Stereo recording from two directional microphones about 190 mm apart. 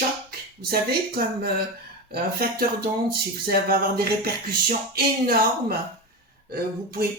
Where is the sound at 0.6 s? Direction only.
55° right (ahead or behind).